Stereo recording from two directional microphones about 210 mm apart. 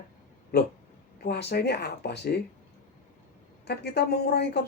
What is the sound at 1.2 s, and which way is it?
Speech, 50° left (ahead or behind).